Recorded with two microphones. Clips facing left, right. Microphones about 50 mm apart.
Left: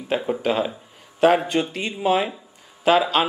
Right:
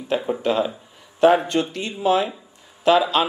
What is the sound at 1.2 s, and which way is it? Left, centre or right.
Speech, centre.